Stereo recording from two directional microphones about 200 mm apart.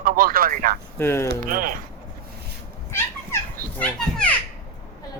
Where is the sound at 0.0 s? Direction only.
45° right (ahead or behind).